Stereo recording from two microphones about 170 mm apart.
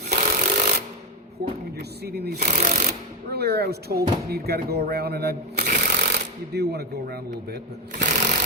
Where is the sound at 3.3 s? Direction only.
70° right (ahead or behind).